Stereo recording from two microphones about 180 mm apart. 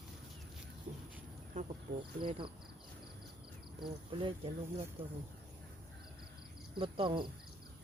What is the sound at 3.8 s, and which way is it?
Speech, 30° right (ahead or behind).